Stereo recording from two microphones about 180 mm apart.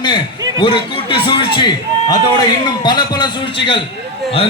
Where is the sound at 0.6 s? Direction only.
30° left (ahead or behind).